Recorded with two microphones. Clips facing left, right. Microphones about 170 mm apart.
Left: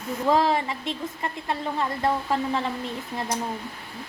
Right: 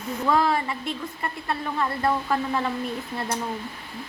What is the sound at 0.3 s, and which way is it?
A woman's voice, 25° left (ahead or behind).